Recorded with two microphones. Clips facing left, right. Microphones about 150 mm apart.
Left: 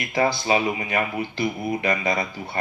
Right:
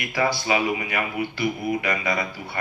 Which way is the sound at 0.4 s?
30° left (ahead or behind).